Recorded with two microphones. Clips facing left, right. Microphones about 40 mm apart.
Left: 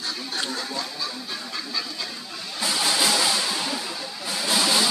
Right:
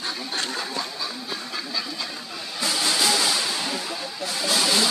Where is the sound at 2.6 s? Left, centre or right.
Centre.